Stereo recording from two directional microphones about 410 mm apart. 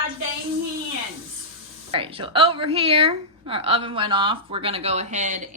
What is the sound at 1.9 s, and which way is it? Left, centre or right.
A woman's voice, centre.